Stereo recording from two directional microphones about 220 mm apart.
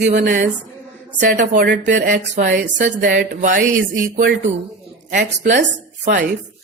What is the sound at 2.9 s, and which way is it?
Speech, 55° right (ahead or behind).